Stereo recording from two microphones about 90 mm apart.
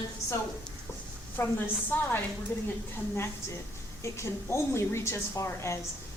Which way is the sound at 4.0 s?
30° left (ahead or behind).